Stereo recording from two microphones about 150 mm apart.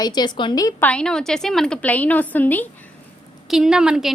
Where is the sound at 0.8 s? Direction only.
10° left (ahead or behind).